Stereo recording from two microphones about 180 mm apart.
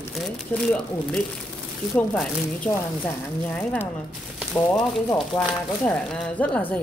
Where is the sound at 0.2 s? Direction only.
5° left (ahead or behind).